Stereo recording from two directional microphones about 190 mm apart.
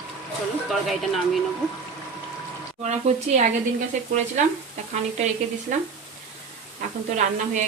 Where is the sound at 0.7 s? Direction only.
Centre (ahead or behind).